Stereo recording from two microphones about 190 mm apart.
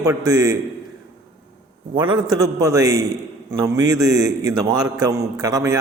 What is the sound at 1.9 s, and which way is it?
A man's voice, 25° right (ahead or behind).